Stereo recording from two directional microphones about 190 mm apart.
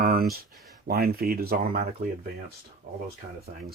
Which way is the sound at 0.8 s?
55° right (ahead or behind).